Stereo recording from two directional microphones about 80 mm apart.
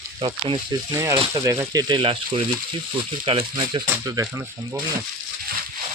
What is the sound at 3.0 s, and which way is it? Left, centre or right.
Speech, right.